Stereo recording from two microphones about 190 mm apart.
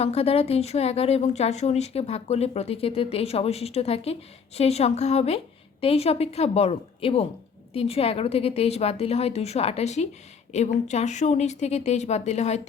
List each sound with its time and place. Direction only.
0.0 s a woman's voice: 30° left (ahead or behind)